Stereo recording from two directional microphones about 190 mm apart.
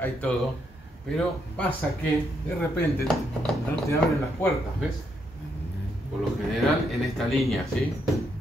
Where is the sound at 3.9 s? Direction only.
15° left (ahead or behind).